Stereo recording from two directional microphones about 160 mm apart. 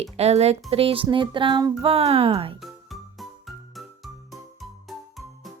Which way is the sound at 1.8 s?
40° right (ahead or behind).